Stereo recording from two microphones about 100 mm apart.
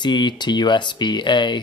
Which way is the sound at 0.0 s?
50° left (ahead or behind).